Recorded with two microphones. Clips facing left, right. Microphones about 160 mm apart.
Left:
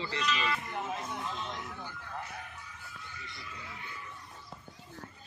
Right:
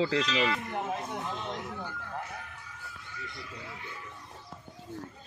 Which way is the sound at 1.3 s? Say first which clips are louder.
Right 3 dB; 55° right (ahead or behind).